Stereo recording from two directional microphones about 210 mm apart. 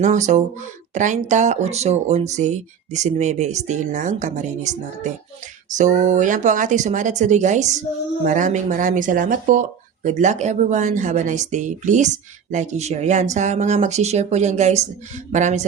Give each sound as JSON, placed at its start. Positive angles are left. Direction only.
{"t": 0.0, "sound": "speech", "side_deg": -35}